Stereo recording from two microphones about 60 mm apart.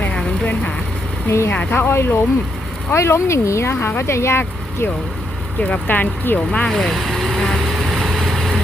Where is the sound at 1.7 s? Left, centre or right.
Left.